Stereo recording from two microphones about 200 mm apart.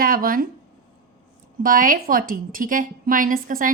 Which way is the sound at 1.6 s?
45° right (ahead or behind).